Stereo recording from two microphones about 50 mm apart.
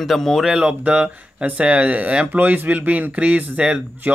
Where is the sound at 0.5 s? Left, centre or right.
Centre.